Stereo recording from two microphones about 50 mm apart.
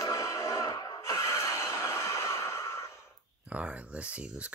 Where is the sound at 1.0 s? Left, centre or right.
Left.